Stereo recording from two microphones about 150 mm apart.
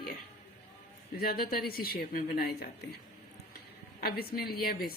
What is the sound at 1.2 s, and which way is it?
A woman's voice, 85° left.